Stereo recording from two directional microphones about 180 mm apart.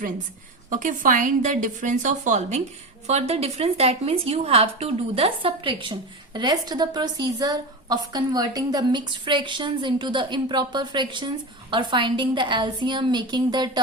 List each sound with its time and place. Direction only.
0.7 s a woman's voice: 50° right (ahead or behind); by 13.7 s 25° right (ahead or behind)